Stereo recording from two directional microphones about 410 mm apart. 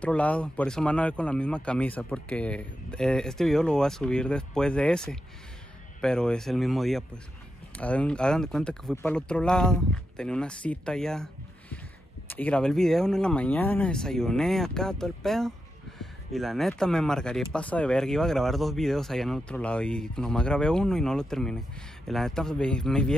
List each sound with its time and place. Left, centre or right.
0.0 s speech: centre
12.3 s speech: centre